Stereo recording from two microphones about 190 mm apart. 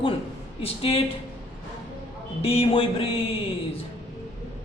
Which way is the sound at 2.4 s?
30° left (ahead or behind).